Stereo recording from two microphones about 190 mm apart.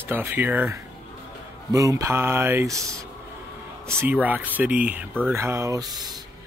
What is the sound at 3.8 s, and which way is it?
Speech, 10° right (ahead or behind).